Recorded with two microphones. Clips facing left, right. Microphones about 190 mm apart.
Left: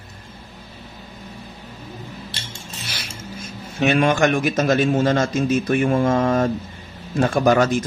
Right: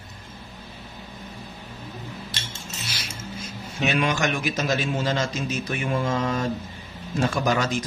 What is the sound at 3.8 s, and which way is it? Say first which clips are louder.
A man's voice: left 7 dB; 55° left (ahead or behind).